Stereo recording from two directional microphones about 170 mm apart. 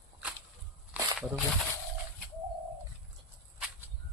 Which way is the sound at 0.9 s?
Centre (ahead or behind).